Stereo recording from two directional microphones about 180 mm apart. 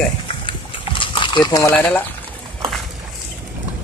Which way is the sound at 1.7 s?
10° left (ahead or behind).